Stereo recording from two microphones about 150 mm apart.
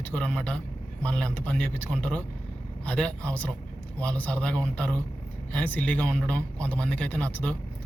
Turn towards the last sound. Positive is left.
turn(degrees=10)  # may be behind; listen again after turning